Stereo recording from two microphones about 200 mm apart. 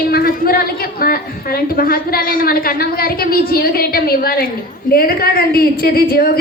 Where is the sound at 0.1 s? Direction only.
50° left (ahead or behind).